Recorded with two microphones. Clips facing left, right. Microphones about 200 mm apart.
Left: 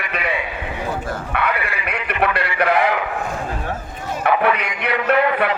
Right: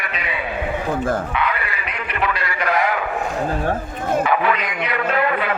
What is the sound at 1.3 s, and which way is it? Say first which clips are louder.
Speech: even; 60° left (ahead or behind).